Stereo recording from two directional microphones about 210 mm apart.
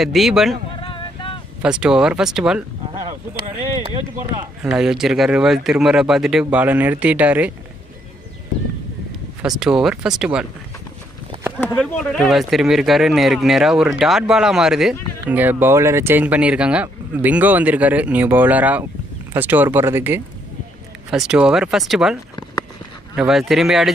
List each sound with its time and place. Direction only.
0.0 s speech: centre (ahead or behind)
0.8 s wind noise: 25° left (ahead or behind)
1.6 s speech: 5° right (ahead or behind)
3.8 s speech: 20° right (ahead or behind)
4.6 s speech: centre (ahead or behind)
9.4 s speech: 5° right (ahead or behind)
11.6 s speech: 5° left (ahead or behind)